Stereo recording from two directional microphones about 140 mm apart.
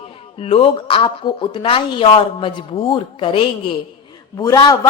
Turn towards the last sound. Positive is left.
turn(degrees=25)  # may be behind; listen again after turning